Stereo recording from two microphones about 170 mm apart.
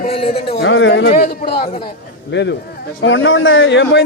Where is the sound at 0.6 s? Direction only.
90° left; by 1.7 s 75° left (ahead or behind).